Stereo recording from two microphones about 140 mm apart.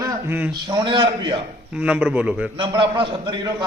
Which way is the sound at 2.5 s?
35° right (ahead or behind).